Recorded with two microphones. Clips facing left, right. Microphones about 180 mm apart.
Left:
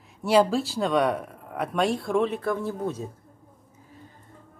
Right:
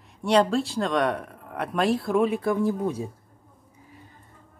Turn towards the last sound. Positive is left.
turn(degrees=-10)  # may be behind; listen again after turning